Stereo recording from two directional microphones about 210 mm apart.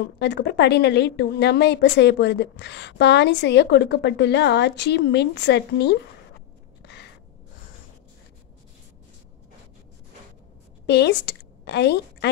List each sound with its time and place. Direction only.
0.2 s a woman's voice: 50° left (ahead or behind)
6.8 s a sound: 50° left (ahead or behind)
10.9 s a woman's voice: 55° left (ahead or behind)